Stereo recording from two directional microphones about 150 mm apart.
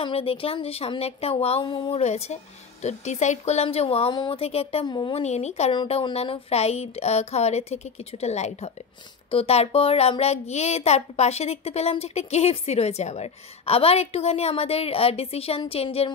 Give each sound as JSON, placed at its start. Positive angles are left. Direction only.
{"t": 0.0, "sound": "a woman's voice", "side_deg": 35}
{"t": 4.8, "sound": "a woman's voice", "side_deg": 30}
{"t": 5.2, "sound": "a child's voice", "side_deg": 45}
{"t": 5.7, "sound": "a child's voice", "side_deg": 35}